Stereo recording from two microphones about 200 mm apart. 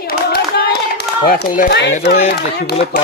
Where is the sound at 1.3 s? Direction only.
55° left (ahead or behind).